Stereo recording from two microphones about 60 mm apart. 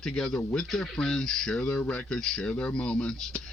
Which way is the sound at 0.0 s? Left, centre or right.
Centre.